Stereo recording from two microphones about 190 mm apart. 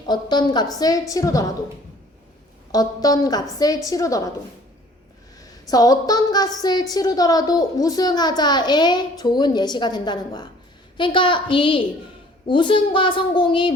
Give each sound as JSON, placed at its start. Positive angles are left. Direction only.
{"t": 0.1, "sound": "a woman's voice", "side_deg": 25}
{"t": 2.7, "sound": "a woman's voice", "side_deg": 20}
{"t": 5.4, "sound": "a woman's voice", "side_deg": 20}